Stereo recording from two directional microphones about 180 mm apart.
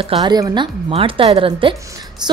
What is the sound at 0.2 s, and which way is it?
A woman's voice, 20° right (ahead or behind).